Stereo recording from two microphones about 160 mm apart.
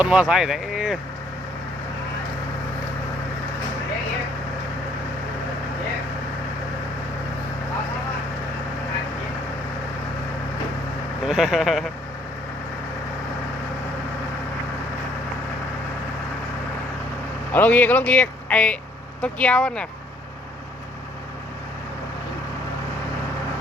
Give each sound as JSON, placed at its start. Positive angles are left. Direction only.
{"t": 0.0, "sound": "speech", "side_deg": -5}
{"t": 11.3, "sound": "speech", "side_deg": -5}
{"t": 17.5, "sound": "speech", "side_deg": 10}